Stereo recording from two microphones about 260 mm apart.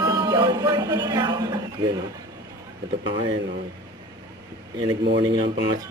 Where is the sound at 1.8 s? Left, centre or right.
Centre.